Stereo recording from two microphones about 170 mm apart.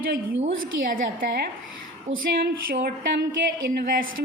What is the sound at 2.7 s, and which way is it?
Speech, 55° right (ahead or behind).